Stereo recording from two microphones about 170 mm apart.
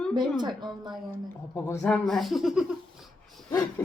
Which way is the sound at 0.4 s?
25° right (ahead or behind).